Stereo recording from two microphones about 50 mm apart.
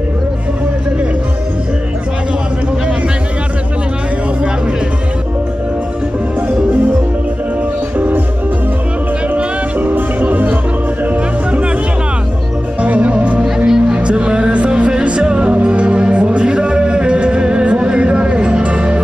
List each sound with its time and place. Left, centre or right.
9.3 s music: right
12.8 s music: right
13.7 s music: centre
13.9 s music: right